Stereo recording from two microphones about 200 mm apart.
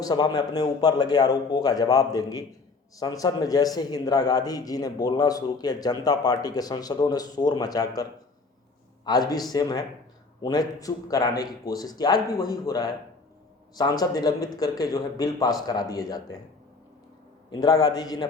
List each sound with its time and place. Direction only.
0.0 s a man's voice: 20° left (ahead or behind)
9.0 s a man's voice: 20° left (ahead or behind)
17.5 s a man's voice: 20° left (ahead or behind)